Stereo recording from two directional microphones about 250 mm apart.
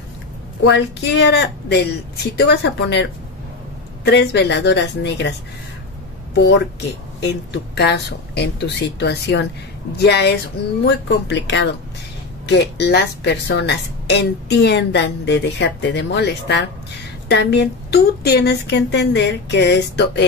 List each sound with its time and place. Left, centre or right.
0.7 s speech: left
7.2 s a woman's voice: left